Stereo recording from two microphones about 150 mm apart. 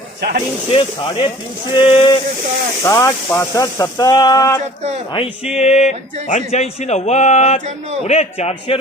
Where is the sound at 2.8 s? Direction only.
20° left (ahead or behind).